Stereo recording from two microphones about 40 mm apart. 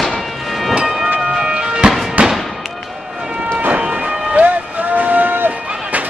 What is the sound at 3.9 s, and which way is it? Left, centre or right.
Music, right.